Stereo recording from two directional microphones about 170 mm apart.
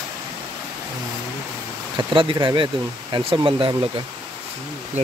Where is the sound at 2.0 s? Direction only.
25° right (ahead or behind).